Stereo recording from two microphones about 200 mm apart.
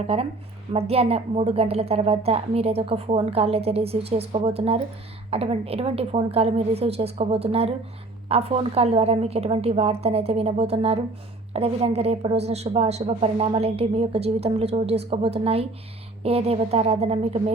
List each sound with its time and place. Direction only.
0.1 s a woman's voice: 30° right (ahead or behind)